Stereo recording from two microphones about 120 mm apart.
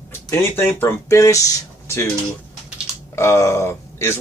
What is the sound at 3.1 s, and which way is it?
Speech, 25° left (ahead or behind).